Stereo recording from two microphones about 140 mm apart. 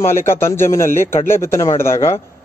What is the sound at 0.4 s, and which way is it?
A man's voice, 20° left (ahead or behind).